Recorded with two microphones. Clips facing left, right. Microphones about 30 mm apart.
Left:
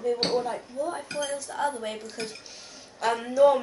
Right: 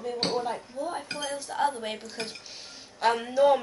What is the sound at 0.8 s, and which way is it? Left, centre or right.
A woman's voice, centre.